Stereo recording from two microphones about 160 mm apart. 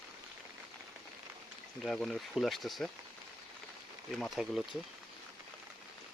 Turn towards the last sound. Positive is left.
turn(degrees=0)  # may be behind; listen again after turning